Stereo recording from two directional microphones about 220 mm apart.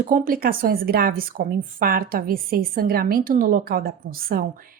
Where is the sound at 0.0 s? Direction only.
40° right (ahead or behind).